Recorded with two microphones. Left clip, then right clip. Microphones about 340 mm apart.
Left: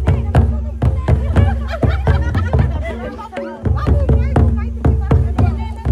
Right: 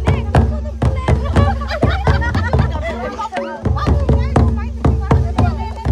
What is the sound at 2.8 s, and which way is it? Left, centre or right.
Chatter, centre.